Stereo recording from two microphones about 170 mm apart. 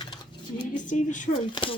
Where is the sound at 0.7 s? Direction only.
45° left (ahead or behind).